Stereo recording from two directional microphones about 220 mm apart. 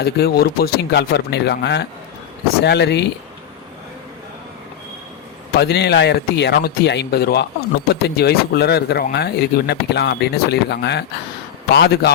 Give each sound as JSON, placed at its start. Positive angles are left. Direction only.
{"t": 0.0, "sound": "speech", "side_deg": 45}
{"t": 5.5, "sound": "speech", "side_deg": 50}